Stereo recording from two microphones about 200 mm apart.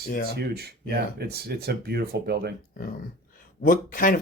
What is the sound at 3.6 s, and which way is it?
Speech, 45° left (ahead or behind).